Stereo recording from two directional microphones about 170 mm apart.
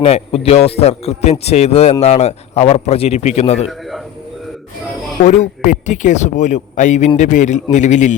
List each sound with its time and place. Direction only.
0.0 s speech: 35° left (ahead or behind)
5.2 s speech: 45° left (ahead or behind)